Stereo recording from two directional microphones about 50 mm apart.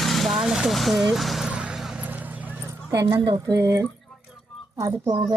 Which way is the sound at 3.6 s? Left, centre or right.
Right.